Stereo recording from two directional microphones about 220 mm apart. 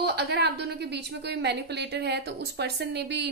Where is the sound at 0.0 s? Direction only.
45° right (ahead or behind).